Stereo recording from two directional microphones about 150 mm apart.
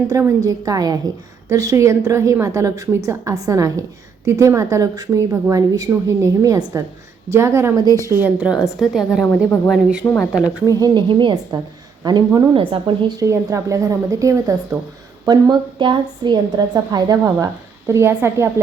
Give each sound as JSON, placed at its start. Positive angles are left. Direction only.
{"t": 0.1, "sound": "a woman's voice", "side_deg": -20}
{"t": 10.0, "sound": "speech", "side_deg": 15}
{"t": 10.8, "sound": "a woman's voice", "side_deg": -30}